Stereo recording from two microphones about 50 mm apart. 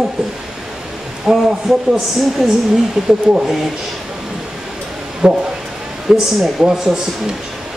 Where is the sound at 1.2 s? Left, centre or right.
Centre.